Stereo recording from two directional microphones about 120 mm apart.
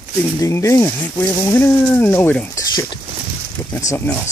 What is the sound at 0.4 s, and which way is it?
Speech, 25° left (ahead or behind).